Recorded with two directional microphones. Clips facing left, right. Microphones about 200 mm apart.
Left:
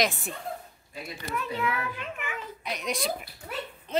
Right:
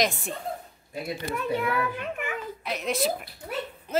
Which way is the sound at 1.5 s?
55° right (ahead or behind).